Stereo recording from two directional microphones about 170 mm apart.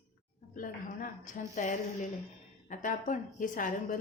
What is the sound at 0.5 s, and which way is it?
A woman's voice, 55° left (ahead or behind).